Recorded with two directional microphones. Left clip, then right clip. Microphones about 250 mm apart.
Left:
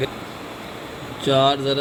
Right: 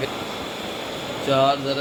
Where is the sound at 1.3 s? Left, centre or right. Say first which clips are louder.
Left 1 dB; left.